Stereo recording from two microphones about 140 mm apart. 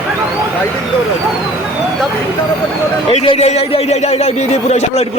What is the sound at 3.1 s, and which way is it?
Speech, 45° left (ahead or behind).